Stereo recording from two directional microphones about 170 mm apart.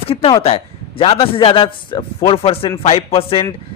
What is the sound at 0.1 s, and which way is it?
A man's voice, 35° left (ahead or behind).